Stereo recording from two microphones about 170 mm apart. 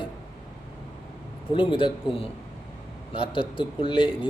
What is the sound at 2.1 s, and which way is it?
Speech, 30° left (ahead or behind).